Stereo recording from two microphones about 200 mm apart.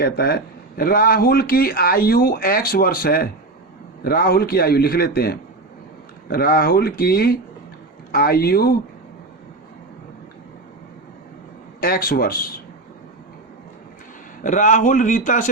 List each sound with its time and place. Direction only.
0.0 s speech: 50° left (ahead or behind)
11.8 s speech: 50° left (ahead or behind)
14.4 s a man's voice: 40° left (ahead or behind)